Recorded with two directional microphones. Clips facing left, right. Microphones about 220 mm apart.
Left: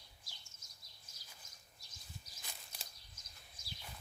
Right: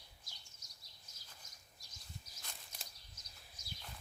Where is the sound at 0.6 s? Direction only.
50° left (ahead or behind).